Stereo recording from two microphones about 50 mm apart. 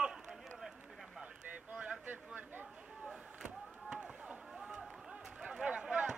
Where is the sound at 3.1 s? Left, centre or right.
Centre.